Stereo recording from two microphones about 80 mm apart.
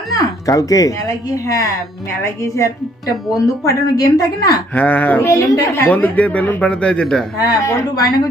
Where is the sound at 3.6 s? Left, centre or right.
Left.